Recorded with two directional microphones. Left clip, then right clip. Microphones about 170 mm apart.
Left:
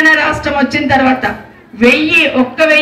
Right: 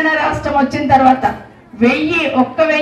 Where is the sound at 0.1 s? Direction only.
55° right (ahead or behind).